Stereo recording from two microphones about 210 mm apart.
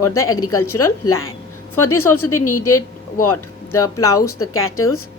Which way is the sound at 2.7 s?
90° left.